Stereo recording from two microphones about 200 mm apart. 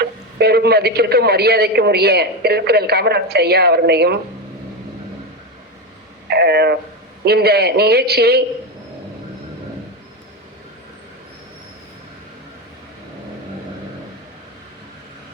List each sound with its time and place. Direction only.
0.0 s a man's voice: 55° right (ahead or behind)
6.2 s a sound: 55° right (ahead or behind)
7.3 s a man's voice: 55° right (ahead or behind)